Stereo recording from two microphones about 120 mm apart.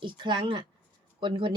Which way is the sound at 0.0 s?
40° right (ahead or behind).